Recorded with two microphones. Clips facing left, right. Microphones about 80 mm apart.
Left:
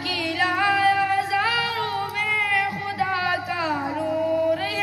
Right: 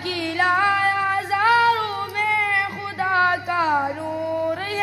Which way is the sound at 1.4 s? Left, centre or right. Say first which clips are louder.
Right 7 dB; right.